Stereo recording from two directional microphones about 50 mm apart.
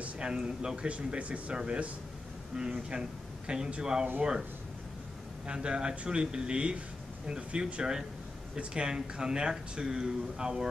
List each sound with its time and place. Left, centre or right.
0.2 s speech: centre
5.5 s speech: centre